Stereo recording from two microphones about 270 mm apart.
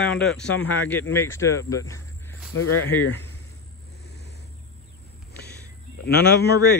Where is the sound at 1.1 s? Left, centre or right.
Centre.